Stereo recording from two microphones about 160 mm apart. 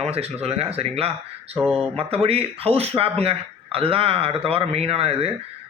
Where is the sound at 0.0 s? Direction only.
40° right (ahead or behind).